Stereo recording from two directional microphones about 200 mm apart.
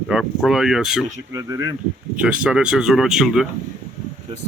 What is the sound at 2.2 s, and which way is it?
Speech, 5° right (ahead or behind).